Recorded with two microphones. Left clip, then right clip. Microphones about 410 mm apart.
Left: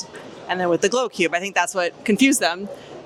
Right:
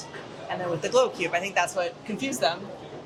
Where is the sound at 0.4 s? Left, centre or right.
Left.